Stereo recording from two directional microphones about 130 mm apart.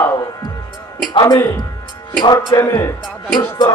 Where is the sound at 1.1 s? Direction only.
35° left (ahead or behind).